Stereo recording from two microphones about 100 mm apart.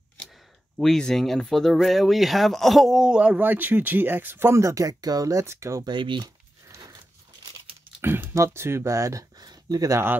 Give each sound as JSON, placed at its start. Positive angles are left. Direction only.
{"t": 0.7, "sound": "speech", "side_deg": 5}
{"t": 5.9, "sound": "speech", "side_deg": -55}
{"t": 8.0, "sound": "speech", "side_deg": -20}